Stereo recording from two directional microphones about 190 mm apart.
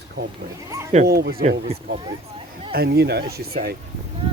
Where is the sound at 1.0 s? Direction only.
55° right (ahead or behind).